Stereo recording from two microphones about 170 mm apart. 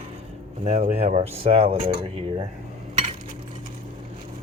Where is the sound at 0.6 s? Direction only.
40° right (ahead or behind).